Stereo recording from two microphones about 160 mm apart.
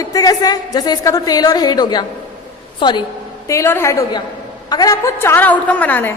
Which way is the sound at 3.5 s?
15° left (ahead or behind).